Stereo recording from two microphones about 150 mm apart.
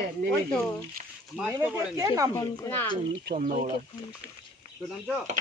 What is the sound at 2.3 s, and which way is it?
Speech, 30° left (ahead or behind).